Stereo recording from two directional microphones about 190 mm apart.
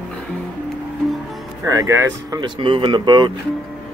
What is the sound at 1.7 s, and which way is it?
Speech, 15° right (ahead or behind).